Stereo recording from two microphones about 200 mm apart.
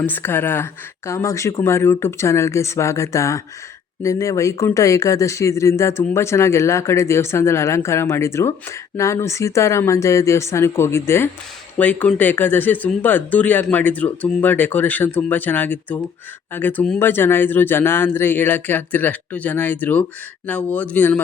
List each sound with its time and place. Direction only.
0.0 s speech: 10° left (ahead or behind)